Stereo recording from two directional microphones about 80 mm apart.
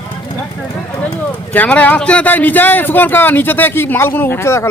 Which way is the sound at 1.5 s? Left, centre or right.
Left.